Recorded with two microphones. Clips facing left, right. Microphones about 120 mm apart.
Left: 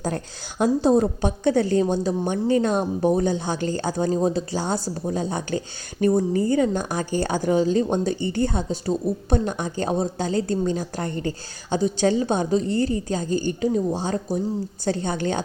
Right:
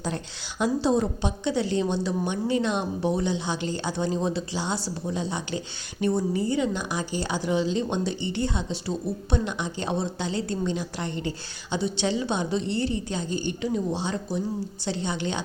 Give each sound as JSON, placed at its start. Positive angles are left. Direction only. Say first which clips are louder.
{"t": 0.6, "sound": "a woman's voice", "louder": "left 5 dB", "side_deg": 45}